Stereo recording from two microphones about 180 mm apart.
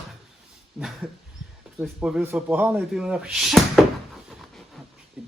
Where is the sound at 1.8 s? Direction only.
5° right (ahead or behind).